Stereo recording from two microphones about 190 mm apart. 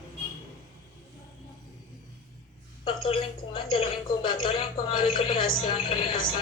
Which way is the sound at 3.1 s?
30° left (ahead or behind).